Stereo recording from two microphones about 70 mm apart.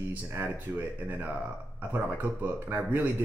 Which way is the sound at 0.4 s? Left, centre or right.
Right.